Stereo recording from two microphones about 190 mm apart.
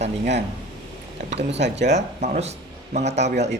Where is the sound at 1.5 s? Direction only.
65° right (ahead or behind).